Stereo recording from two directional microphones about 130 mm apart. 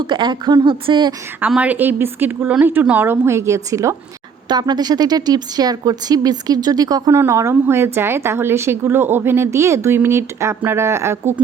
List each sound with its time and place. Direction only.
0.1 s a woman's voice: 35° right (ahead or behind)
1.4 s a woman's voice: 10° right (ahead or behind)